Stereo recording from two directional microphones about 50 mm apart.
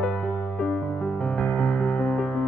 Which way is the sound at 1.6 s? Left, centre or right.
Left.